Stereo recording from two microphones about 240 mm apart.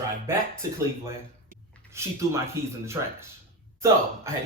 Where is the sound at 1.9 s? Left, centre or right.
Centre.